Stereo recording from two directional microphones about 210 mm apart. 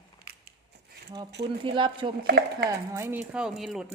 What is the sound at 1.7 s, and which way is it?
Speech, 25° right (ahead or behind).